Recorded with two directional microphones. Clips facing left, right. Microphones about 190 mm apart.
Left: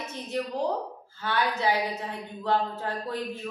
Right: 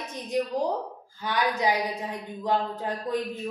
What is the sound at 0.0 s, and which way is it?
A woman's voice, 15° right (ahead or behind).